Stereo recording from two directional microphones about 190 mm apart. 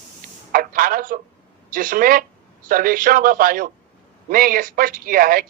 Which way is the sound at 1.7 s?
45° right (ahead or behind).